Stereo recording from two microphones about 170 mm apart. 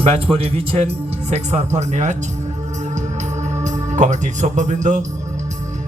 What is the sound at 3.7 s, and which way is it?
Speech, 45° right (ahead or behind).